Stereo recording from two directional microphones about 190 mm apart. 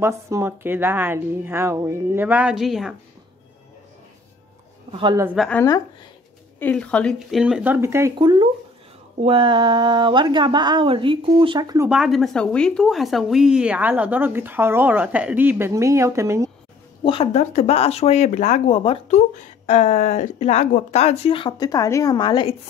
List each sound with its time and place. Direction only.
0.0 s a woman's voice: 15° right (ahead or behind)
4.9 s speech: 25° right (ahead or behind)
5.2 s speech: 5° right (ahead or behind)
5.5 s speech: 15° left (ahead or behind); by 8.1 s 15° right (ahead or behind)
8.2 s speech: 25° right (ahead or behind)
11.9 s a woman's voice: centre (ahead or behind)
17.0 s speech: 30° left (ahead or behind)